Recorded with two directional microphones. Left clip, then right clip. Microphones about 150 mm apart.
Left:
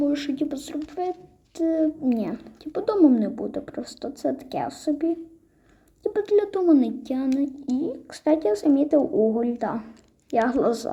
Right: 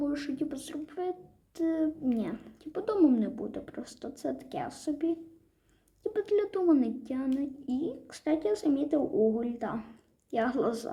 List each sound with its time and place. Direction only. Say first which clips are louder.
0.0 s a child's voice: left 8 dB; 20° left (ahead or behind)